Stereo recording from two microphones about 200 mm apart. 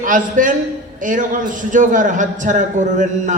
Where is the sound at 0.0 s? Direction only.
40° right (ahead or behind).